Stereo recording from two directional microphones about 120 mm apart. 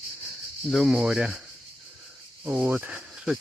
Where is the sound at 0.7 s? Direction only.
Centre (ahead or behind).